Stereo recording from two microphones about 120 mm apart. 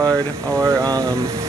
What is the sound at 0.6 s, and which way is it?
Speech, 30° right (ahead or behind).